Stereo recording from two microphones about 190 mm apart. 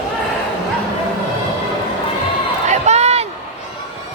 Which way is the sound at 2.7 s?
35° right (ahead or behind).